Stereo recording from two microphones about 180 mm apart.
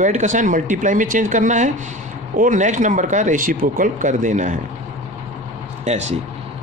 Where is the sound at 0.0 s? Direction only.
45° right (ahead or behind).